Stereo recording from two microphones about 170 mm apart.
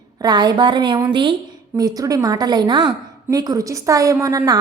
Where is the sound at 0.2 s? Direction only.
25° right (ahead or behind).